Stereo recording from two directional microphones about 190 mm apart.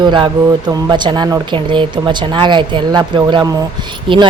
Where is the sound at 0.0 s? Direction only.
25° right (ahead or behind).